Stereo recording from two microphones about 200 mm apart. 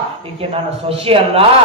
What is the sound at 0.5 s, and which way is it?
Speech, 30° right (ahead or behind).